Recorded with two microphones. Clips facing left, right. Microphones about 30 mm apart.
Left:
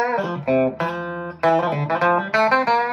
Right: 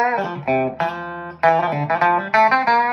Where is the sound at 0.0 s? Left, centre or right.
Centre.